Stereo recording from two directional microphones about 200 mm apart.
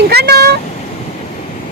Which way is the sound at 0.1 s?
55° right (ahead or behind).